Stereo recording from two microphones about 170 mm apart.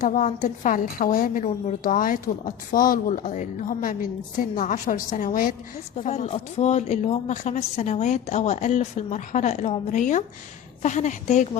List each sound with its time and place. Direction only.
0.0 s a woman's voice: 50° left (ahead or behind)
6.0 s a woman's voice: 40° left (ahead or behind)